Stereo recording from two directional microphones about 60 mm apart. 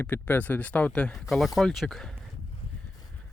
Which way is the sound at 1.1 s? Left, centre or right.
Centre.